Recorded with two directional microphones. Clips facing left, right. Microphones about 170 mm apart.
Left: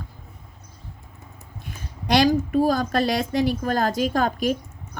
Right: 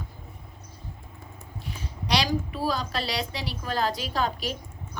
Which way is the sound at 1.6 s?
50° left (ahead or behind).